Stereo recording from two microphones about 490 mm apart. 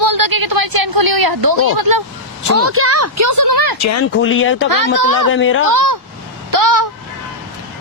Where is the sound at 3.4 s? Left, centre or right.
Right.